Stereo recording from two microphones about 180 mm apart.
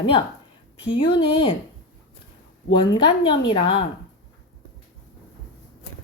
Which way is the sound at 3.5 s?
30° left (ahead or behind).